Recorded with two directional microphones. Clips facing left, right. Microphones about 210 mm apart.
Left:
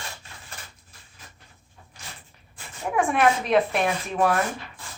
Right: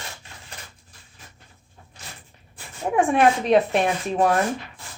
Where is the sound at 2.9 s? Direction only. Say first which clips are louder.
Right 3 dB; 30° right (ahead or behind).